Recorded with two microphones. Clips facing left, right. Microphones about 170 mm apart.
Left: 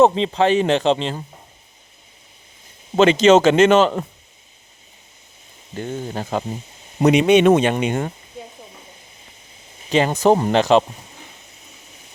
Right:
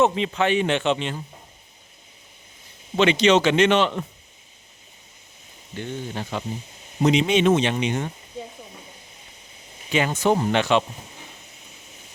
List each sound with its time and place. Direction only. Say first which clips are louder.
0.0 s speech: left 5 dB; 35° left (ahead or behind)
2.9 s a man's voice: left 5 dB; 45° left (ahead or behind)
5.7 s a man's voice: left 4 dB; 45° left (ahead or behind)
7.0 s speech: left 6 dB; 60° left (ahead or behind)
9.9 s speech: left 5 dB; 35° left (ahead or behind)